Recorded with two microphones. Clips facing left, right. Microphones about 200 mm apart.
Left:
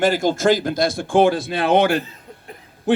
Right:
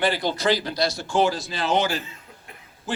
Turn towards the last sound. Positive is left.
turn(degrees=60)  # may be behind; listen again after turning